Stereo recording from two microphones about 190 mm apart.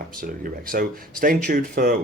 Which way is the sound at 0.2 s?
50° right (ahead or behind).